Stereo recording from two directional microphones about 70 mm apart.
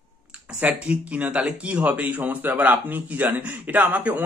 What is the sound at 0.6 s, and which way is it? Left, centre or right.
Speech, centre.